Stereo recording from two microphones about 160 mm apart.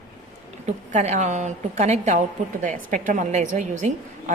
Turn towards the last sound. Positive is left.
turn(degrees=-50)  # may be behind; listen again after turning